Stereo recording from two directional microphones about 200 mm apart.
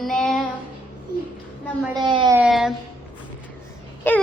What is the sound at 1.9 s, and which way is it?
Speech, 20° right (ahead or behind).